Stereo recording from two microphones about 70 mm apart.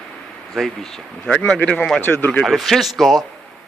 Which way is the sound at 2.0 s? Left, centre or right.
Left.